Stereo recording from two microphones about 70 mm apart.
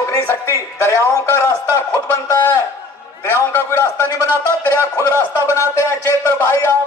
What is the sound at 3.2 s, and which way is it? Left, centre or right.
A man's voice, left.